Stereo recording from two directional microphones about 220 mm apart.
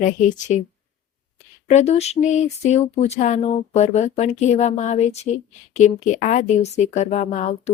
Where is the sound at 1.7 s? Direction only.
30° left (ahead or behind).